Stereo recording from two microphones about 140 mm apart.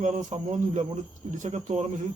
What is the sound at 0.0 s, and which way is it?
A man's voice, 60° right (ahead or behind).